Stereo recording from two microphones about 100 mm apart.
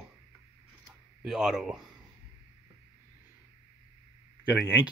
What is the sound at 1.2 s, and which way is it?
Speech, 5° right (ahead or behind).